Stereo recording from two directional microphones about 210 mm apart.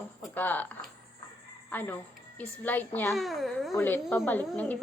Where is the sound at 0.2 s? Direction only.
10° left (ahead or behind).